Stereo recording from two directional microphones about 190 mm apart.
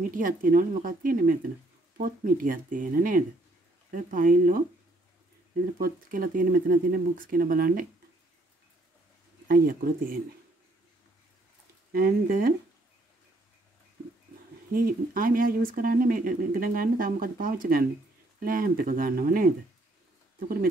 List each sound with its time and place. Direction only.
0.1 s speech: 45° right (ahead or behind)
5.8 s speech: 50° right (ahead or behind)
9.5 s speech: 50° right (ahead or behind)
11.9 s speech: 50° right (ahead or behind)
14.7 s speech: 50° right (ahead or behind)